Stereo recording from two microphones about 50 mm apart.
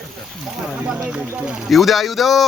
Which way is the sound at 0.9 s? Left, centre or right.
Centre.